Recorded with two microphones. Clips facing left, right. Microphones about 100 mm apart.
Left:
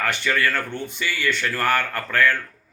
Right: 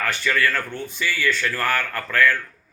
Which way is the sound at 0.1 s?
20° left (ahead or behind).